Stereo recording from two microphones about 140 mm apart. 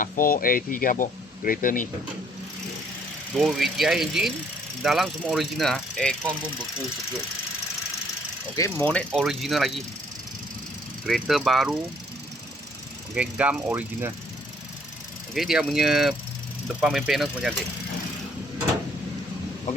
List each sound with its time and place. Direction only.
0.0 s speech: 80° left
3.3 s speech: centre (ahead or behind)
8.5 s speech: 20° left (ahead or behind)
8.9 s speech: 10° left (ahead or behind)
11.0 s speech: centre (ahead or behind)
13.1 s speech: 10° right (ahead or behind)
15.4 s speech: 5° right (ahead or behind)